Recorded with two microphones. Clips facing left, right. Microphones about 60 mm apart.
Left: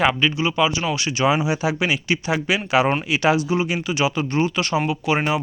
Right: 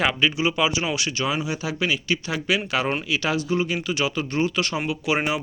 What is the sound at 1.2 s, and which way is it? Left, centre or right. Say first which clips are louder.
Speech: left 10 dB; left.